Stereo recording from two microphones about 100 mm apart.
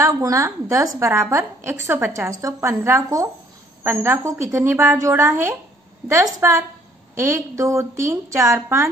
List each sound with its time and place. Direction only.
0.0 s a woman's voice: 35° right (ahead or behind)